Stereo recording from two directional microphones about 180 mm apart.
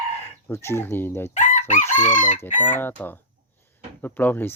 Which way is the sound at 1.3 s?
45° left (ahead or behind).